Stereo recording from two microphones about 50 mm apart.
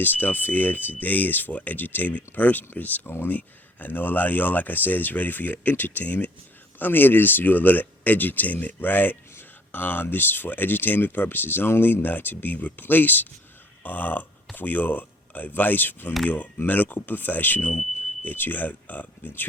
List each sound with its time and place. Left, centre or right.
0.0 s speech: left